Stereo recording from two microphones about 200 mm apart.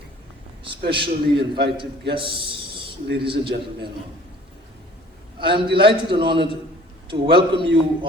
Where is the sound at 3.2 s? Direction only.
25° right (ahead or behind).